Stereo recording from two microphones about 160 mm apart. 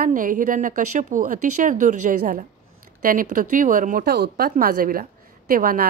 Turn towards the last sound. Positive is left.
turn(degrees=-65)  # may be behind; listen again after turning